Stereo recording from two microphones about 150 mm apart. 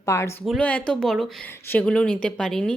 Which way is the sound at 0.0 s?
20° left (ahead or behind).